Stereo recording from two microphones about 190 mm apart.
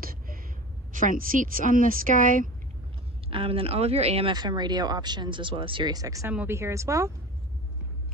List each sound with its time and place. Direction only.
0.0 s gasp: 50° right (ahead or behind)
0.9 s speech: 45° right (ahead or behind)
3.3 s speech: 30° right (ahead or behind)